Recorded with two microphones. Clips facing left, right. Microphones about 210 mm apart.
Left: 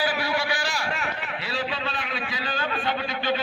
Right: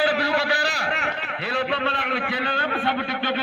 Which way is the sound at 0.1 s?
60° right (ahead or behind).